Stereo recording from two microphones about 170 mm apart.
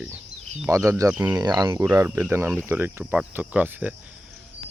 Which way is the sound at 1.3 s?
25° right (ahead or behind).